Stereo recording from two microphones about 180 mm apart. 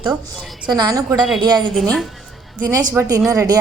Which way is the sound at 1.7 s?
Centre (ahead or behind).